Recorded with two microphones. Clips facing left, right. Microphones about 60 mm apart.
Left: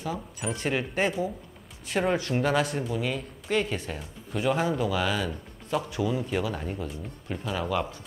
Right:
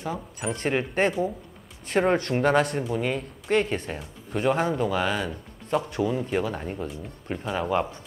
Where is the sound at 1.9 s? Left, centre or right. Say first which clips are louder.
Right 4 dB; right.